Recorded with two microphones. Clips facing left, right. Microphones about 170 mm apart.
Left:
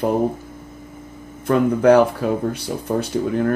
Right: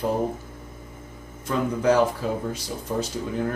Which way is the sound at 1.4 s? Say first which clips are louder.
Left 8 dB; 60° left (ahead or behind).